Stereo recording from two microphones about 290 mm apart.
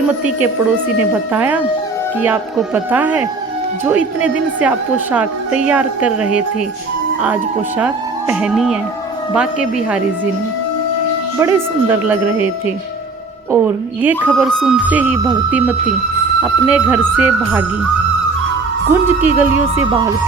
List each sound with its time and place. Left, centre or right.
1.1 s speech: centre
5.1 s speech: centre
8.3 s speech: centre
11.3 s speech: centre
13.5 s speech: centre
18.9 s speech: centre